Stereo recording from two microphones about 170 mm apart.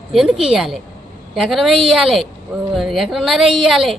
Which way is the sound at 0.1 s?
Centre (ahead or behind).